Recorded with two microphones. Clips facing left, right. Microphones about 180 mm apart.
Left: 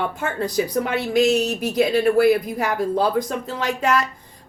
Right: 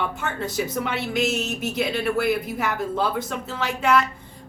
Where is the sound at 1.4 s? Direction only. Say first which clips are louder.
Left 6 dB; 40° left (ahead or behind).